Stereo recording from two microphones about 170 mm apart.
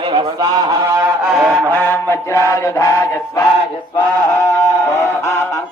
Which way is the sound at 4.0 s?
20° left (ahead or behind).